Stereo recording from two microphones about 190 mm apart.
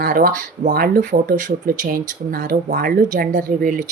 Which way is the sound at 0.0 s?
50° right (ahead or behind).